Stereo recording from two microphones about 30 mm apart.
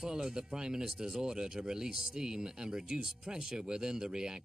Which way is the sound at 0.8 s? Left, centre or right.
Centre.